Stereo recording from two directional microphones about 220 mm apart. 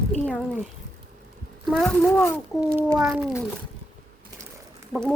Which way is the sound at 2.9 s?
5° right (ahead or behind).